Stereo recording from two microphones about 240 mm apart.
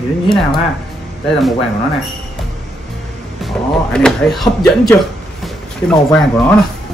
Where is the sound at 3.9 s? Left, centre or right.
Centre.